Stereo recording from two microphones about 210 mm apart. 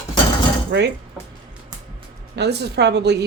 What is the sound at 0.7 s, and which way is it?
Speech, 55° right (ahead or behind).